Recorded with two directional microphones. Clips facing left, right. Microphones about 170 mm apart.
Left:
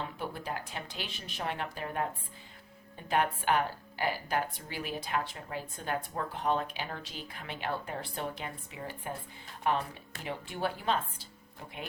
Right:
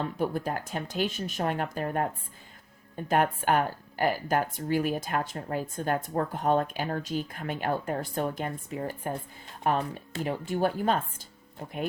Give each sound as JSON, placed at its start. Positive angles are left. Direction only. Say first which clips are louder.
{"t": 0.0, "sound": "speech", "louder": "right 9 dB", "side_deg": -45}
{"t": 3.1, "sound": "speech", "louder": "right 4 dB", "side_deg": -45}